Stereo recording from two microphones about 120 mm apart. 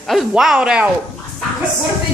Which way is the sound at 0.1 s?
5° right (ahead or behind).